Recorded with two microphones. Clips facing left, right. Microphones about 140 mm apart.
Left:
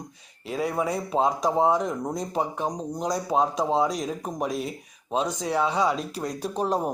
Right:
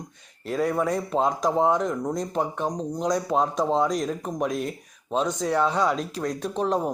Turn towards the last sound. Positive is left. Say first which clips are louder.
# right 1 dB
turn(degrees=5)  # may be behind; listen again after turning